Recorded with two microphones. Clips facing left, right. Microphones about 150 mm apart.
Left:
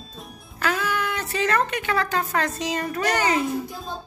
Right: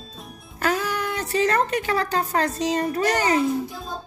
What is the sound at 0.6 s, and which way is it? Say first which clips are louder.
A child's voice: right 1 dB; 40° right (ahead or behind).